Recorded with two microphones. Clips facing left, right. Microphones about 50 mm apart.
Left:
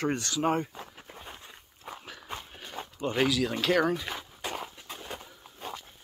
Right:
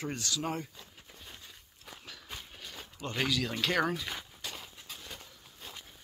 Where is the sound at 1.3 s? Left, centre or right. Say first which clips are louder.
Left 4 dB; left.